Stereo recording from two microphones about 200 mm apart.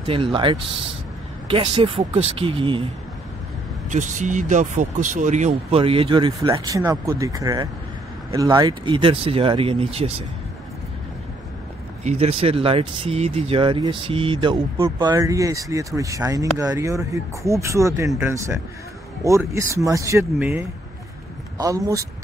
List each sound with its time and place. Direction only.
0.0 s speech: 25° right (ahead or behind)
3.9 s speech: 40° right (ahead or behind)
12.0 s speech: 30° right (ahead or behind); by 20.4 s 15° right (ahead or behind)
21.5 s speech: 15° right (ahead or behind)